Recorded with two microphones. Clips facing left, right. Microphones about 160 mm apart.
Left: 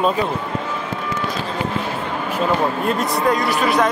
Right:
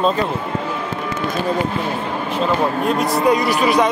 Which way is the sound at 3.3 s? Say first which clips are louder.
Right 2 dB; centre (ahead or behind).